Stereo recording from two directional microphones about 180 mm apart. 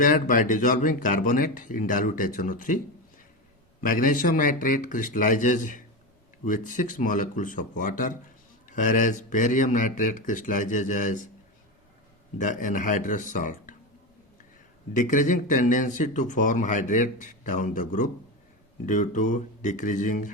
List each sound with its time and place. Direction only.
0.0 s speech: 45° left (ahead or behind)
3.8 s speech: 50° left (ahead or behind)
12.4 s speech: 45° left (ahead or behind)
14.9 s speech: 45° left (ahead or behind)